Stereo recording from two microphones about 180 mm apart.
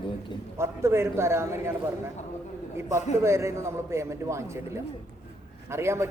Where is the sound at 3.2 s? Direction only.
15° right (ahead or behind).